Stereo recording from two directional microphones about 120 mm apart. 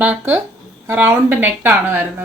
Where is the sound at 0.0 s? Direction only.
15° right (ahead or behind).